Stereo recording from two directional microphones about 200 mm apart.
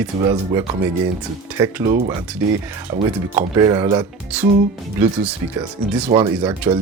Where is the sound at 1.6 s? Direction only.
15° right (ahead or behind).